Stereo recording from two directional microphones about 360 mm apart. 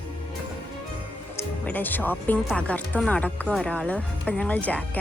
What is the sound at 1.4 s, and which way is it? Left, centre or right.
Speech, centre.